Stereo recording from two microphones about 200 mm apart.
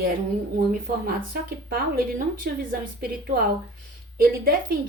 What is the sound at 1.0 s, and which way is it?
A woman's voice, 50° right (ahead or behind).